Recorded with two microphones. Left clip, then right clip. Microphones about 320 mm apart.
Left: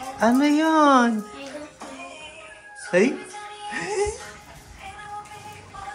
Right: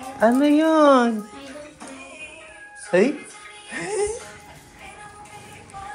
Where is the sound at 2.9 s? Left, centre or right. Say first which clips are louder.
Right 1 dB; centre.